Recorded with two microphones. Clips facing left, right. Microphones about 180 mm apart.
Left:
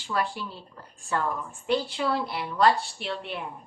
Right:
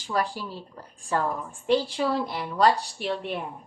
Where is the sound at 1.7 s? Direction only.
40° right (ahead or behind).